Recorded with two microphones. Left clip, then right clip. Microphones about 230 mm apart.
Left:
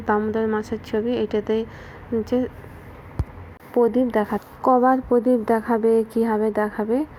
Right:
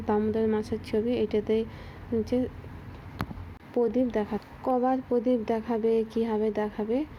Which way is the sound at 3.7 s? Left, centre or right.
Centre.